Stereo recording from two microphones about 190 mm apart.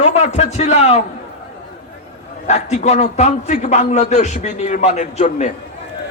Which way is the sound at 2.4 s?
35° left (ahead or behind).